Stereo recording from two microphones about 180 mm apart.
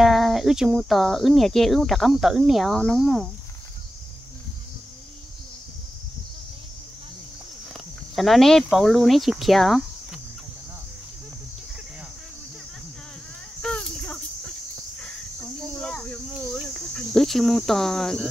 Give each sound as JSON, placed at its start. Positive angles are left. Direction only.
{"t": 0.0, "sound": "speech", "side_deg": 0}
{"t": 8.2, "sound": "speech", "side_deg": 0}
{"t": 13.6, "sound": "cricket", "side_deg": 5}
{"t": 15.8, "sound": "cricket", "side_deg": 5}